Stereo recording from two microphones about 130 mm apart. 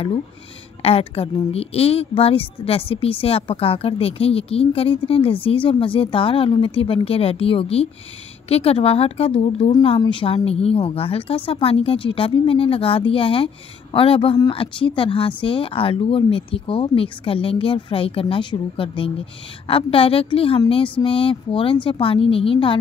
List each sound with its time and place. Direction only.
0.8 s a woman's voice: 50° left (ahead or behind)